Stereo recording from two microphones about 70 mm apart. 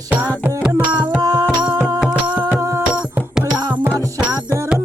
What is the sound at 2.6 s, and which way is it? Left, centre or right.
Music, right.